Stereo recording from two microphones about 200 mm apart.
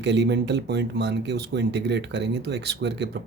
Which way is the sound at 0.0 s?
60° right (ahead or behind).